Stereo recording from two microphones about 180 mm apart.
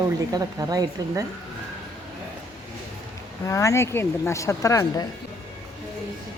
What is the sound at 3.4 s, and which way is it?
A woman's voice, 15° left (ahead or behind).